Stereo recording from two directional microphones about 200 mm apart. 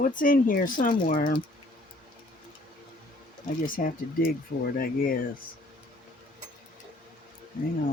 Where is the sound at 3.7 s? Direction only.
45° left (ahead or behind).